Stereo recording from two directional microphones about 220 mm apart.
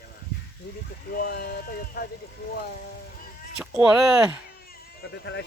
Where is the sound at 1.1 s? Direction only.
45° left (ahead or behind).